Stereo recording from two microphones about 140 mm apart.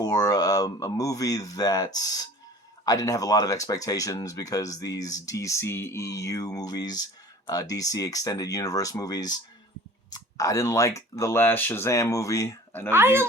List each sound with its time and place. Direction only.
0.0 s speech: 25° left (ahead or behind)
12.9 s speech: 15° right (ahead or behind)